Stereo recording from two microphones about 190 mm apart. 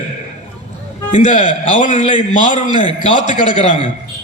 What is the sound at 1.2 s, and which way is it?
A man's voice, 40° left (ahead or behind).